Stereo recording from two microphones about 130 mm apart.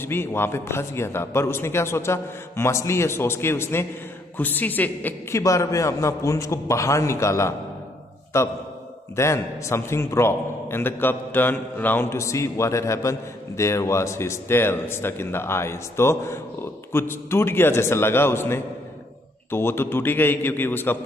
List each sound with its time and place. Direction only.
0.0 s a man's voice: 20° left (ahead or behind)
5.4 s a man's voice: 25° left (ahead or behind)